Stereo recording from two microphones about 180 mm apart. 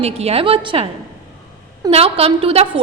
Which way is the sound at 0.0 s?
35° right (ahead or behind).